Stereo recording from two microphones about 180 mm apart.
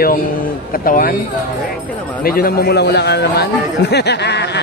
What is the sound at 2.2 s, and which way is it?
A man's voice, 55° left (ahead or behind).